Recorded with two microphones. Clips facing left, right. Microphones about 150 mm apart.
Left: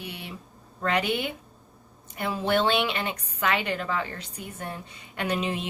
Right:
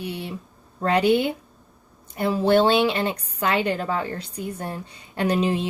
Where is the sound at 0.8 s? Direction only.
30° right (ahead or behind).